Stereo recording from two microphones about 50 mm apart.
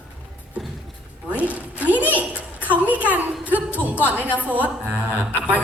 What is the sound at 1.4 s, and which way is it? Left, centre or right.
A woman's voice, right.